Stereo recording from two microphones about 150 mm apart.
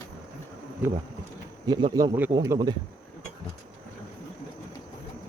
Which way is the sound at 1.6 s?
30° right (ahead or behind).